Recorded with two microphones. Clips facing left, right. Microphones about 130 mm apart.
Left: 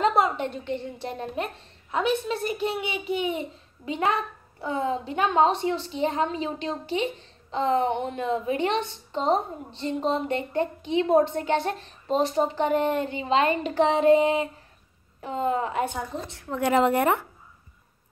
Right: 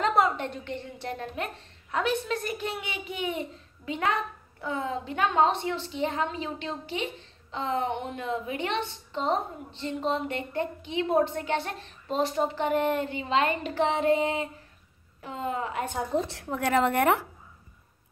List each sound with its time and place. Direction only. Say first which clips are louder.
0.0 s a woman's voice: left 2 dB; 20° left (ahead or behind)
16.6 s a woman's voice: left 3 dB; 10° left (ahead or behind)